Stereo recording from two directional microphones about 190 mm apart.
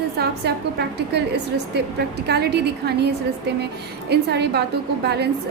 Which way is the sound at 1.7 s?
60° right (ahead or behind).